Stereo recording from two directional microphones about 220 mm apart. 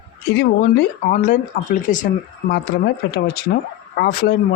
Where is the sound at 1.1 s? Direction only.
35° left (ahead or behind).